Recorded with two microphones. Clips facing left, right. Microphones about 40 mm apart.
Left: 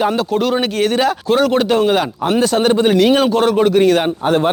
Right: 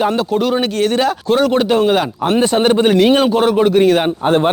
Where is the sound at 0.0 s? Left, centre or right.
Centre.